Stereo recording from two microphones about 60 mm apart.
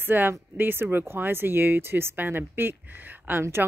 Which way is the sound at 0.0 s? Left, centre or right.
Right.